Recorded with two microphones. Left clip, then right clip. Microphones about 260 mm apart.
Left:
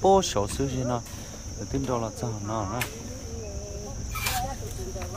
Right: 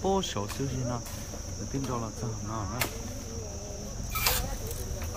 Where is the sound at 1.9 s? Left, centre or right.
Left.